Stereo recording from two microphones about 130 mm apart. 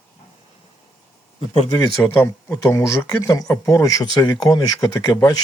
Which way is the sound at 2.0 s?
15° left (ahead or behind).